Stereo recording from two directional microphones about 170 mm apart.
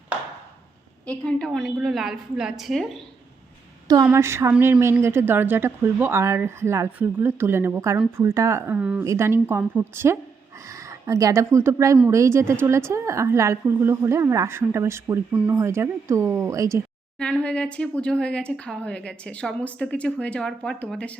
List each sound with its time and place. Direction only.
1.0 s a woman's voice: 5° left (ahead or behind)
3.8 s a woman's voice: 20° right (ahead or behind)
17.2 s speech: 5° left (ahead or behind)